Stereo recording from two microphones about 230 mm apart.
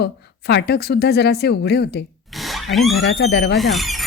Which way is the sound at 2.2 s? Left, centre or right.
Centre.